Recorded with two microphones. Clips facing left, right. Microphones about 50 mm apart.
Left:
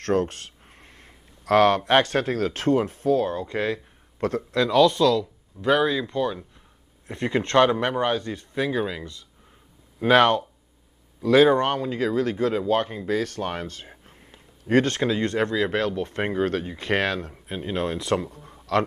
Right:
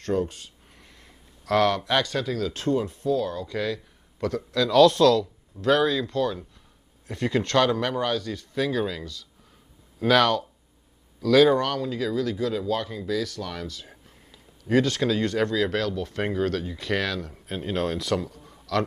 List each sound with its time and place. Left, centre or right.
0.0 s speech: left
0.7 s speech: left
4.7 s speech: centre; by 15.0 s left
15.0 s speech: left
17.3 s speech: centre
18.0 s speech: left